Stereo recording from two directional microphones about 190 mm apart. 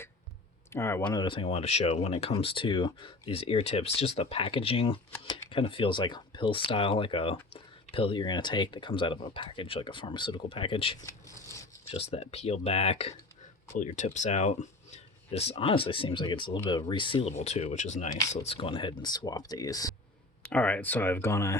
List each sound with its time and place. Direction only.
0.7 s speech: 15° left (ahead or behind); by 10.9 s 30° left (ahead or behind)
11.0 s a sound: 15° left (ahead or behind)
11.9 s speech: 30° left (ahead or behind)
20.4 s speech: 5° left (ahead or behind)